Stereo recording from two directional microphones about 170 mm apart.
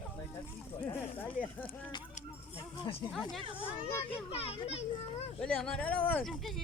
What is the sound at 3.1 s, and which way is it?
Speech, 5° left (ahead or behind).